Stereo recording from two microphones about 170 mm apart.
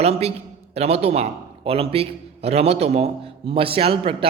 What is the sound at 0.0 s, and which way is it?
A man's voice, 35° right (ahead or behind).